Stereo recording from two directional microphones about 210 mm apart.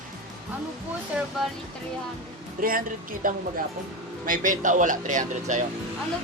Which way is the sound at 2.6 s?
45° right (ahead or behind).